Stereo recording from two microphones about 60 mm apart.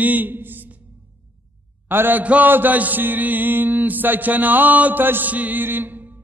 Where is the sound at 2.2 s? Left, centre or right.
Right.